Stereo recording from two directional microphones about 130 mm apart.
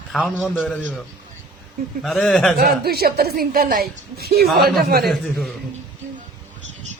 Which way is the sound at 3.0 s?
90° right.